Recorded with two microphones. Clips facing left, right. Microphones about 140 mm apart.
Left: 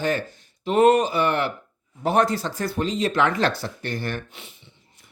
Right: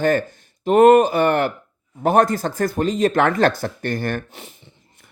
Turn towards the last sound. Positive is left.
turn(degrees=-45)  # may be behind; listen again after turning